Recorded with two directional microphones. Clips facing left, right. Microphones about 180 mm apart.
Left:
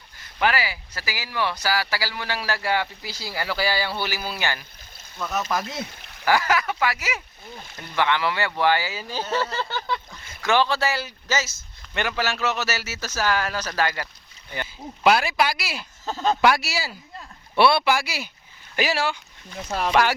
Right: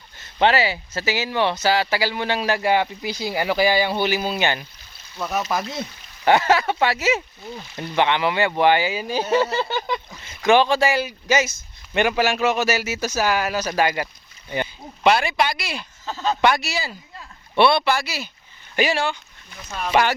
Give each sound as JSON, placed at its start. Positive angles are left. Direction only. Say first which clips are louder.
{"t": 0.2, "sound": "speech", "louder": "right 5 dB", "side_deg": -25}
{"t": 6.2, "sound": "speech", "louder": "right 4 dB", "side_deg": -25}
{"t": 15.0, "sound": "speech", "louder": "right 1 dB", "side_deg": 5}
{"t": 16.0, "sound": "speech", "louder": "left 1 dB", "side_deg": 45}
{"t": 16.4, "sound": "speech", "louder": "right 3 dB", "side_deg": 5}